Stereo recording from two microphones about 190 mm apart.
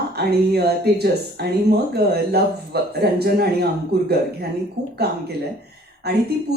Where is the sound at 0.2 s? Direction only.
60° right (ahead or behind).